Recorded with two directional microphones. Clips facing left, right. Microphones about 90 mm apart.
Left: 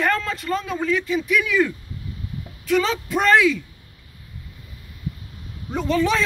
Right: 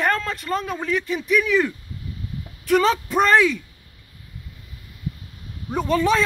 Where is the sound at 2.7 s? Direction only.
45° right (ahead or behind).